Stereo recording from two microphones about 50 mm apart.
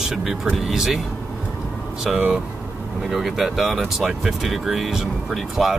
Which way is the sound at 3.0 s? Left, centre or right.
Centre.